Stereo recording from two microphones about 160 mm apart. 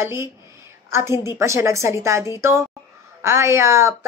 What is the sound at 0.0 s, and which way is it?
A woman's voice, 15° right (ahead or behind).